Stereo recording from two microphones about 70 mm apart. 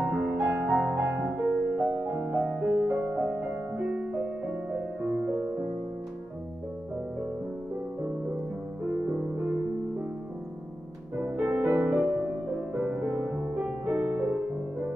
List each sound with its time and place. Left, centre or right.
0.0 s music: right
2.3 s music: centre; by 5.5 s right
11.3 s music: right